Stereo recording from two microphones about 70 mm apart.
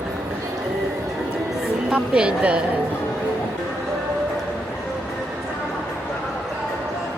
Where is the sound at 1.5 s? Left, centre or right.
Centre.